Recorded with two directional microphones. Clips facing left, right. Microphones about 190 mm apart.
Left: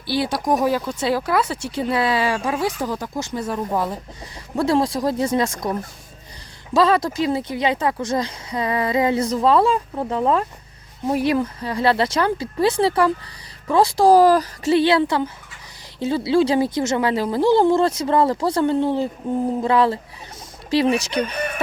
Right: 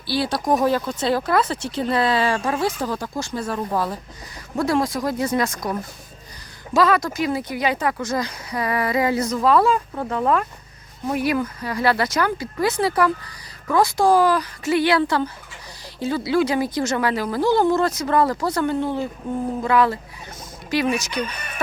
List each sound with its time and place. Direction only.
0.1 s speech: 15° left (ahead or behind)
4.6 s speech: 30° left (ahead or behind)
6.7 s speech: 30° left (ahead or behind)
14.7 s speech: 25° left (ahead or behind)